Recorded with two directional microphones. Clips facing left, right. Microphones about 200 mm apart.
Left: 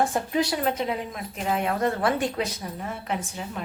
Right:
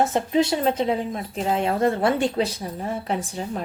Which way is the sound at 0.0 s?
25° right (ahead or behind).